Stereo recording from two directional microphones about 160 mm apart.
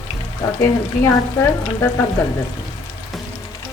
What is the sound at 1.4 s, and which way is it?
Frying, 15° left (ahead or behind).